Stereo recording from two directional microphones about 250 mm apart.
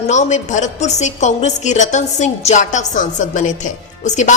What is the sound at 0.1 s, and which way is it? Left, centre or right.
A woman's voice, left.